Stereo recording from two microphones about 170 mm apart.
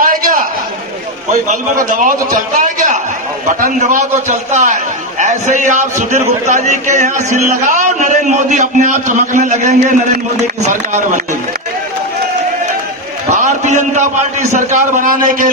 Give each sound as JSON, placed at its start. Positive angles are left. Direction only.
{"t": 0.0, "sound": "a sound", "side_deg": -55}
{"t": 1.3, "sound": "a man's voice", "side_deg": -50}
{"t": 13.3, "sound": "a man's voice", "side_deg": -45}